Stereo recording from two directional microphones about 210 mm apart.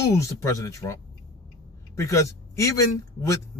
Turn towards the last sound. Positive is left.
turn(degrees=15)  # may be behind; listen again after turning